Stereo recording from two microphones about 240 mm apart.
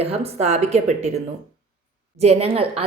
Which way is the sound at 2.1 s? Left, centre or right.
Right.